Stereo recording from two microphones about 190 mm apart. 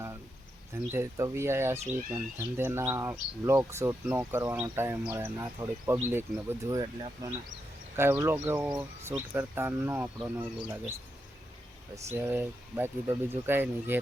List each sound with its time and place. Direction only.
0.9 s speech: 15° right (ahead or behind)
12.1 s speech: 10° right (ahead or behind)